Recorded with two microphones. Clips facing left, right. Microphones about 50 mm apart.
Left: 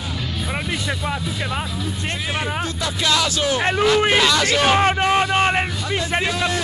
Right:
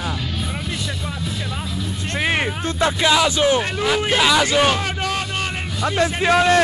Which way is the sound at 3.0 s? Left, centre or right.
Centre.